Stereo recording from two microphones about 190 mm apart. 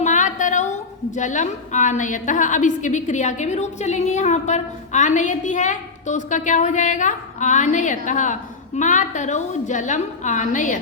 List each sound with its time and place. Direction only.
0.0 s a woman's voice: 40° left (ahead or behind)